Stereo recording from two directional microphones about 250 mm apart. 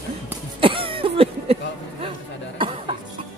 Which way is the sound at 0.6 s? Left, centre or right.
Right.